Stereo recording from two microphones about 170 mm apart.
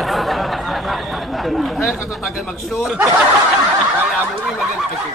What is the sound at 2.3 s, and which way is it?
Speech, 5° right (ahead or behind).